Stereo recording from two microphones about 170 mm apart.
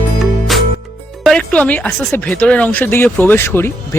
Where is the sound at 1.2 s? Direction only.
5° left (ahead or behind).